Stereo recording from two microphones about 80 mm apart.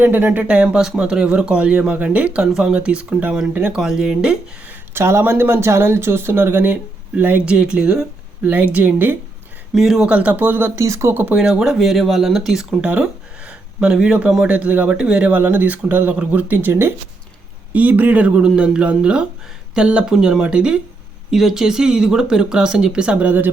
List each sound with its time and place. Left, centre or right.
0.0 s speech: right
3.8 s speech: centre
4.7 s speech: right
9.7 s speech: centre
10.1 s speech: centre
10.8 s speech: right
11.1 s speech: right
11.3 s speech: centre
12.8 s speech: centre